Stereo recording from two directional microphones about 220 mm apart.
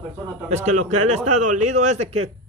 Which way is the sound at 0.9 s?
90° right.